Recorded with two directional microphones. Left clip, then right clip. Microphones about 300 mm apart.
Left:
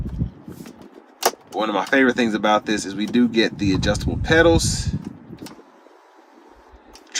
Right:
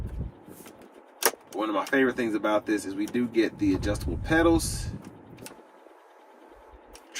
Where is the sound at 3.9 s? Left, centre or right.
Left.